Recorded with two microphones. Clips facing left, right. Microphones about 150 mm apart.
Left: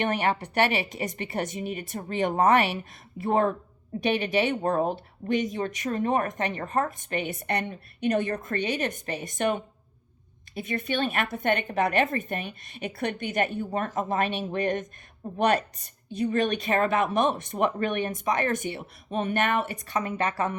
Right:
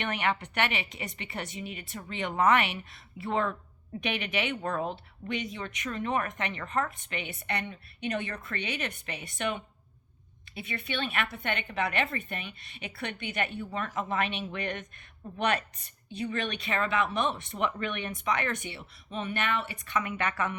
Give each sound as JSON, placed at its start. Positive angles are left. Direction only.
{"t": 0.0, "sound": "a woman's voice", "side_deg": 35}
{"t": 4.0, "sound": "a woman's voice", "side_deg": 35}